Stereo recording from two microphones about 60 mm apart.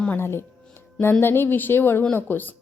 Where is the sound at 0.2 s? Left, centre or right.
Left.